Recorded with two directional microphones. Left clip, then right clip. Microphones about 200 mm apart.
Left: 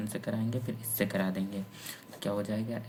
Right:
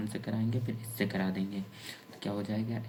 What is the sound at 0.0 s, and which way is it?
Speech, 30° left (ahead or behind).